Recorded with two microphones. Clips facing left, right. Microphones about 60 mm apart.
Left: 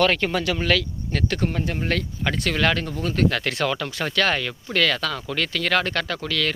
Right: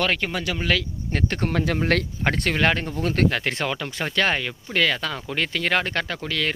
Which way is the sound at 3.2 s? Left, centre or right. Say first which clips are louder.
Left 1 dB; right.